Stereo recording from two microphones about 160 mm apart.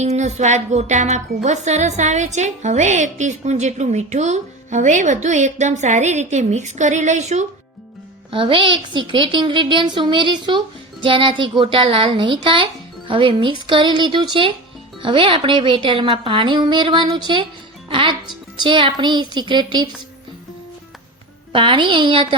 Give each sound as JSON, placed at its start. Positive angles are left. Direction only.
{"t": 0.0, "sound": "a woman's voice", "side_deg": -45}
{"t": 8.3, "sound": "a woman's voice", "side_deg": -35}
{"t": 21.5, "sound": "a woman's voice", "side_deg": -30}